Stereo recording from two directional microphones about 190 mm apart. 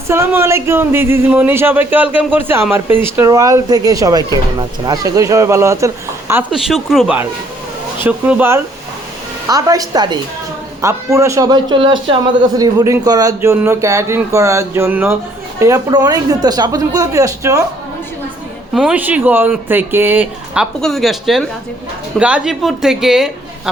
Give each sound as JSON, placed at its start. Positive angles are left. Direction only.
{"t": 0.1, "sound": "speech", "side_deg": -15}
{"t": 6.5, "sound": "speech", "side_deg": 0}
{"t": 18.7, "sound": "speech", "side_deg": -5}